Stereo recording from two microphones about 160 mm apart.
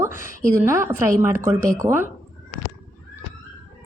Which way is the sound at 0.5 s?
15° right (ahead or behind).